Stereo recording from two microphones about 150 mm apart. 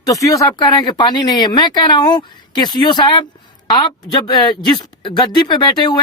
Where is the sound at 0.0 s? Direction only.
25° left (ahead or behind).